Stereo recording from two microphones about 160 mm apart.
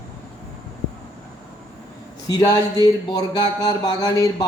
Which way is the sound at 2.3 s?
25° left (ahead or behind).